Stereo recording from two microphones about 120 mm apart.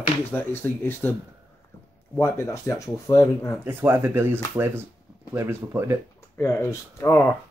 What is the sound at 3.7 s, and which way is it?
Speech, 20° right (ahead or behind).